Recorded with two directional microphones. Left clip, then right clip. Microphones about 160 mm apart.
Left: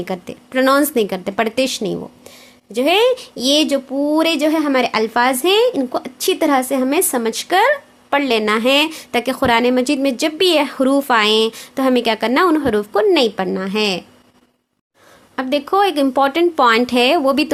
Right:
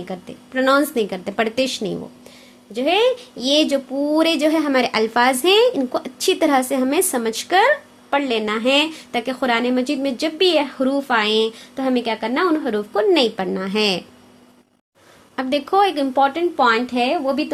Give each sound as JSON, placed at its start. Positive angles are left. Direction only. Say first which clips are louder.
{"t": 0.0, "sound": "a woman's voice", "louder": "left 6 dB", "side_deg": 30}
{"t": 2.7, "sound": "a woman's voice", "louder": "left 3 dB", "side_deg": 30}
{"t": 15.4, "sound": "a woman's voice", "louder": "left 1 dB", "side_deg": 20}
{"t": 16.1, "sound": "speech", "louder": "left 1 dB", "side_deg": 40}